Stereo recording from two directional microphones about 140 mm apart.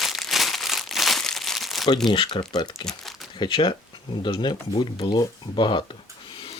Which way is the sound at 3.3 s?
35° left (ahead or behind).